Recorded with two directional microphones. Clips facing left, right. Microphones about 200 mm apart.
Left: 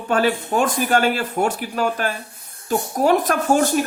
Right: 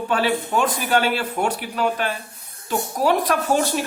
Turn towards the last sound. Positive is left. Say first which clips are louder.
# left 3 dB
turn(degrees=50)  # may be behind; listen again after turning